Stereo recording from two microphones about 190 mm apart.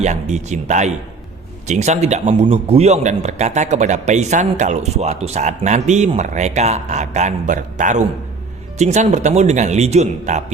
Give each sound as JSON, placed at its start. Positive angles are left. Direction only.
{"t": 0.0, "sound": "a man's voice", "side_deg": -35}